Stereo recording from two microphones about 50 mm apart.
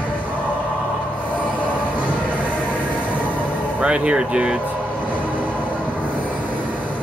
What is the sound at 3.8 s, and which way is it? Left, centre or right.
Speech, right.